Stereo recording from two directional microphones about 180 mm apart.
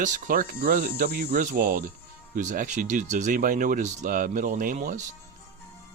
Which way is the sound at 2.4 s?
45° right (ahead or behind).